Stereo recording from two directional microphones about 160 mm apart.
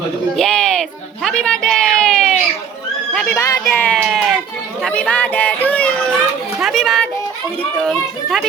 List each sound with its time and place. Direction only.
0.3 s a sound: 5° left (ahead or behind)
3.1 s horse: 5° left (ahead or behind)
3.3 s a child's voice: 20° left (ahead or behind)
4.0 s music: 5° right (ahead or behind)
4.8 s a child's voice: 10° left (ahead or behind)